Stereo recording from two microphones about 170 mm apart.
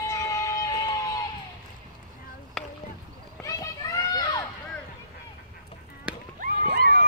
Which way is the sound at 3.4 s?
20° left (ahead or behind).